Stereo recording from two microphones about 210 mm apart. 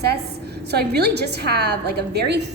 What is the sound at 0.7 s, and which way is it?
A woman's voice, 50° right (ahead or behind).